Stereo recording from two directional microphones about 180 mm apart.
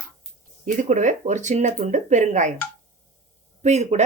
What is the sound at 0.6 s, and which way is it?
Speech, 45° right (ahead or behind).